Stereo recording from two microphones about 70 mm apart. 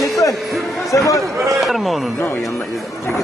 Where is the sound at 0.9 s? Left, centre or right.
Left.